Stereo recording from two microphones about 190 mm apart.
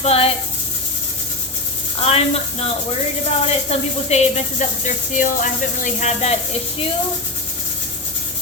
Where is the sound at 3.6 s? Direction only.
35° left (ahead or behind).